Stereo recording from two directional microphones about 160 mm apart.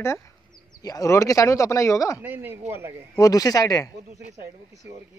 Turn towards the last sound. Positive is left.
turn(degrees=20)  # may be behind; listen again after turning